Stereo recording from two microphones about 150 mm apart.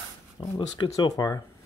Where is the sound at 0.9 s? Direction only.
25° left (ahead or behind).